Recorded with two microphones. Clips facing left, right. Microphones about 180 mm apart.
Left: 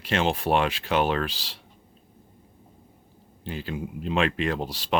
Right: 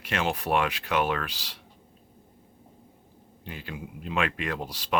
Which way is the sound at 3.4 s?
30° left (ahead or behind).